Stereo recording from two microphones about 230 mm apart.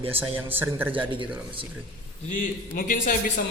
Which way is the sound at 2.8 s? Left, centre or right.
Left.